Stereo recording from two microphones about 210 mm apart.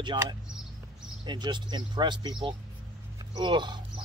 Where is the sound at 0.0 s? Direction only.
20° right (ahead or behind).